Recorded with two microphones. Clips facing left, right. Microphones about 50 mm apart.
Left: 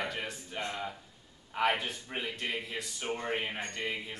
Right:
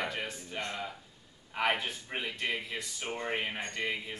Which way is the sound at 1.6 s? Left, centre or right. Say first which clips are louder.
Left 1 dB; centre.